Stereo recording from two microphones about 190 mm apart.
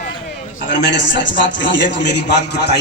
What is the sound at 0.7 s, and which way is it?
A man's voice, 65° left (ahead or behind).